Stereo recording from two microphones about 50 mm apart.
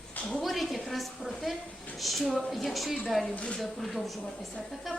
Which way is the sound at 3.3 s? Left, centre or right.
Left.